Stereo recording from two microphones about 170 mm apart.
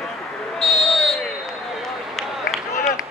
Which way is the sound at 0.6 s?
Centre (ahead or behind).